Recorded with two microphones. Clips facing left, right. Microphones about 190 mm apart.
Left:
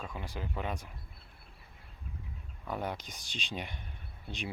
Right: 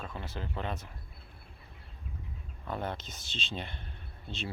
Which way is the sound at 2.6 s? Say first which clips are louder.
Even; 10° left (ahead or behind).